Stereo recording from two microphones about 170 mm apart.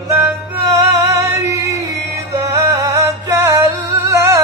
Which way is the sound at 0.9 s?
20° right (ahead or behind).